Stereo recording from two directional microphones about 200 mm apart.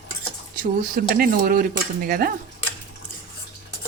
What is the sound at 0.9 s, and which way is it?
Speech, 45° right (ahead or behind).